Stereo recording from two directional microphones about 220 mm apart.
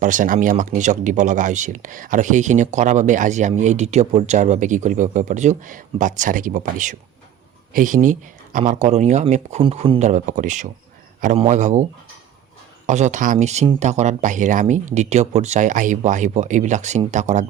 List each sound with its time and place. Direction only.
0.0 s speech: 35° right (ahead or behind)